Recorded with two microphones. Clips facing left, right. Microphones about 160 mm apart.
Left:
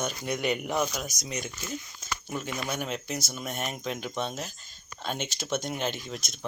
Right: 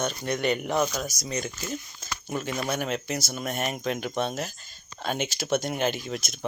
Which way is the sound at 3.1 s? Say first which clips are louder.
Right 4 dB; 80° right.